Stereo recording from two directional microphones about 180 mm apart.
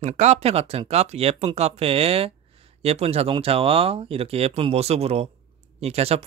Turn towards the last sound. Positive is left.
turn(degrees=-35)  # may be behind; listen again after turning